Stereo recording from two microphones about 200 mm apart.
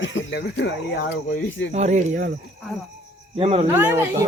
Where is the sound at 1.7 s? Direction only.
35° right (ahead or behind).